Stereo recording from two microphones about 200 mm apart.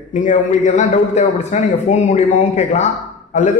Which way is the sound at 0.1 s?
40° left (ahead or behind).